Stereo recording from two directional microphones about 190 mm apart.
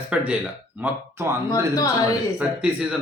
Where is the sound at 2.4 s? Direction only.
5° right (ahead or behind).